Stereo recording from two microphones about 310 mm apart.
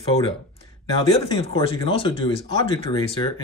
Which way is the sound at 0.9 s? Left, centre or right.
Centre.